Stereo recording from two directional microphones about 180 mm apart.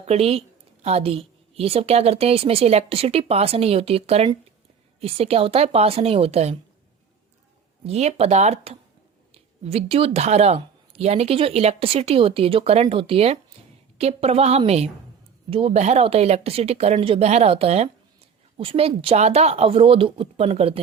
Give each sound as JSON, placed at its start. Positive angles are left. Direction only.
{"t": 0.0, "sound": "a woman's voice", "side_deg": -35}
{"t": 7.9, "sound": "speech", "side_deg": -35}